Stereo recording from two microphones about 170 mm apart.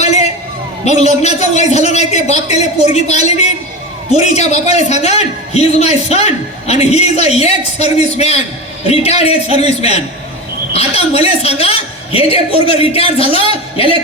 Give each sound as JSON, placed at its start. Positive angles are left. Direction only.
{"t": 0.0, "sound": "a sound", "side_deg": 40}
{"t": 0.9, "sound": "a man's voice", "side_deg": 40}
{"t": 13.2, "sound": "a man's voice", "side_deg": -30}